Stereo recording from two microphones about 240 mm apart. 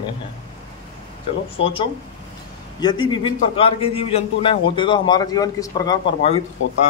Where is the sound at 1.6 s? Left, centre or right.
Left.